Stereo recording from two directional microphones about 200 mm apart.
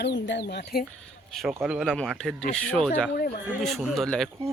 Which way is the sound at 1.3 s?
Centre (ahead or behind).